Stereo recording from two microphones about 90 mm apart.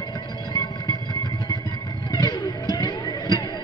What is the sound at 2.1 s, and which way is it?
Music, 45° left (ahead or behind).